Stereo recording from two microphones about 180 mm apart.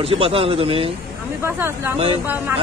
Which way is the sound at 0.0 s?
30° right (ahead or behind).